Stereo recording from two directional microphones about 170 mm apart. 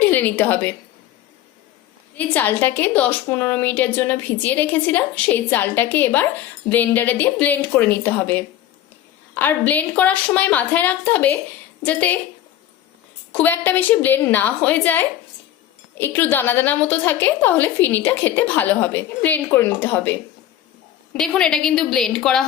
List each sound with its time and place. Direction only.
0.0 s a woman's voice: 10° left (ahead or behind)
2.1 s a woman's voice: 10° left (ahead or behind)
13.3 s a woman's voice: 10° left (ahead or behind)